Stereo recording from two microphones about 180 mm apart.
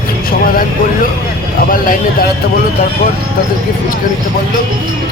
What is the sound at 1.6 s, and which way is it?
Speech, 50° left (ahead or behind).